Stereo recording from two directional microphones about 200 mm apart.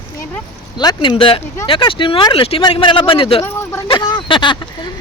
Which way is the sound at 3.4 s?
10° left (ahead or behind).